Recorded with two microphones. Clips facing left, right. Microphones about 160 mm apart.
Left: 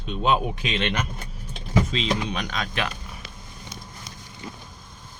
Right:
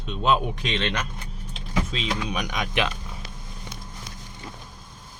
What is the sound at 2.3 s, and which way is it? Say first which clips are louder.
Speech: right 2 dB; 15° right (ahead or behind).